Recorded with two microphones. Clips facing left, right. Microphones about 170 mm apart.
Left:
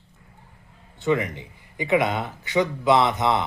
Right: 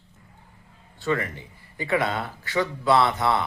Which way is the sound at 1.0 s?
20° left (ahead or behind).